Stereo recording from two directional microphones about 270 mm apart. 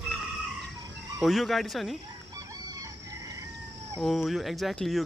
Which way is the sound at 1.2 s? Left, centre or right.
Centre.